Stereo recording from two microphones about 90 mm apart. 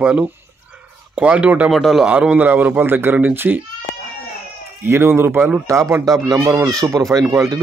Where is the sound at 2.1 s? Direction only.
15° right (ahead or behind).